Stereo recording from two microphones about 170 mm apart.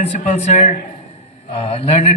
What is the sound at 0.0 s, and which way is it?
A man's voice, 40° left (ahead or behind).